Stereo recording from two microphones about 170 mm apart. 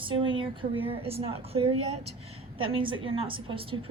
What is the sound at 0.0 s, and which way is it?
A woman's voice, 30° right (ahead or behind).